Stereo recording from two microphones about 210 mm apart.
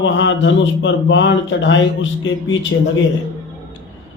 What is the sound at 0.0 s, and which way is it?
Speech, 60° left (ahead or behind).